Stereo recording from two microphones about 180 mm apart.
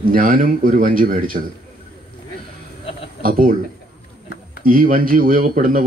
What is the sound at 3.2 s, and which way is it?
Speech, 55° right (ahead or behind).